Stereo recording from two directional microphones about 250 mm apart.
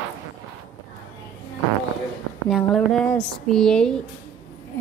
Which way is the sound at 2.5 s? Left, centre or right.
Centre.